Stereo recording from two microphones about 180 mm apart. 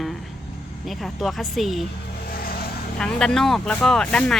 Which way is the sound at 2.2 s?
55° left (ahead or behind).